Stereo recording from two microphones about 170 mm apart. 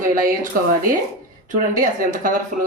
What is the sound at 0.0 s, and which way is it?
Speech, 55° right (ahead or behind).